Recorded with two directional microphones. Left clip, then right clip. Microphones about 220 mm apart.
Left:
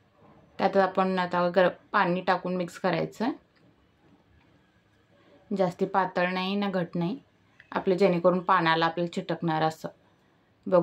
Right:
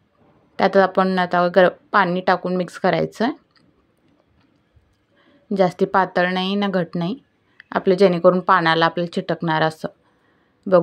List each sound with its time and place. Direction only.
0.6 s speech: 35° right (ahead or behind)
5.5 s speech: 35° right (ahead or behind)